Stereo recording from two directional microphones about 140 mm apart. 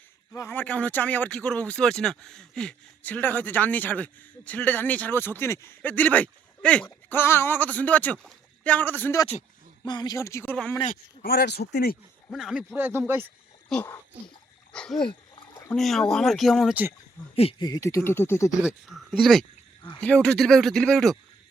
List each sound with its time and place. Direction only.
0.3 s speech: 15° left (ahead or behind)
9.8 s speech: 30° left (ahead or behind)
10.5 s speech: 10° left (ahead or behind)
11.6 s speech: 90° left
12.3 s speech: 5° right (ahead or behind)
12.7 s speech: 15° right (ahead or behind)
13.7 s speech: 5° left (ahead or behind)
17.6 s speech: 25° left (ahead or behind)
18.6 s speech: centre (ahead or behind)